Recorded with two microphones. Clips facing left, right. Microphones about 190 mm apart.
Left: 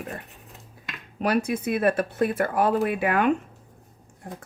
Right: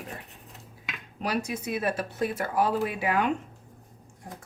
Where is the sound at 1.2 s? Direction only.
55° left (ahead or behind).